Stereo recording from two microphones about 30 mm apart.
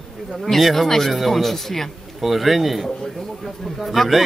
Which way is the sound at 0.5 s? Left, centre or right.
Centre.